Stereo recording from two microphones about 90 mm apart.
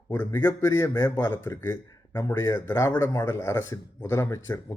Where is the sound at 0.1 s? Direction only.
25° left (ahead or behind).